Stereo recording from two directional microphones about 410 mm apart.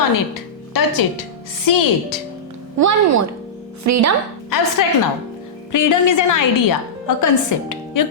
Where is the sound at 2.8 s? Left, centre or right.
Right.